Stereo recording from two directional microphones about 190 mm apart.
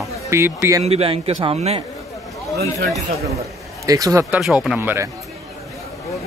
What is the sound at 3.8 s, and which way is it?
Speech, 20° right (ahead or behind).